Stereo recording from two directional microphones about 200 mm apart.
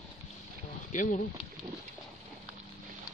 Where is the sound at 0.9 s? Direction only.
40° left (ahead or behind).